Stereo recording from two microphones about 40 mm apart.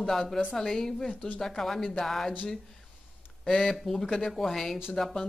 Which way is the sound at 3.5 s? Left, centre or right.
Centre.